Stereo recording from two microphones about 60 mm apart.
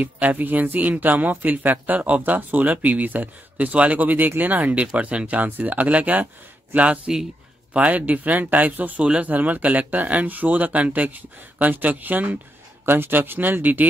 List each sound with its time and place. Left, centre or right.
0.0 s speech: right
9.0 s speech: centre